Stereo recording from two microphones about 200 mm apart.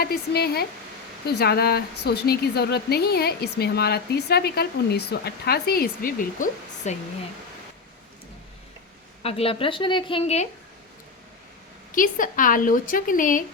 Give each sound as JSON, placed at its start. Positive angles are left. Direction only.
{"t": 0.0, "sound": "a woman's voice", "side_deg": 50}
{"t": 9.2, "sound": "a woman's voice", "side_deg": 30}
{"t": 11.9, "sound": "a woman's voice", "side_deg": 45}